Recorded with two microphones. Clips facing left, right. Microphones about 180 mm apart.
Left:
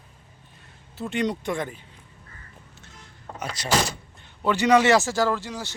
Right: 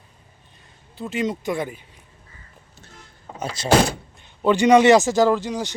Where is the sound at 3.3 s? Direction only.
25° right (ahead or behind).